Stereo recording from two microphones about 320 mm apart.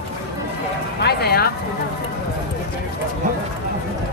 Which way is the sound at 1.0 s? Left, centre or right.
Left.